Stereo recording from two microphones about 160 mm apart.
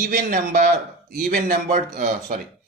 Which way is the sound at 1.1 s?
65° right (ahead or behind).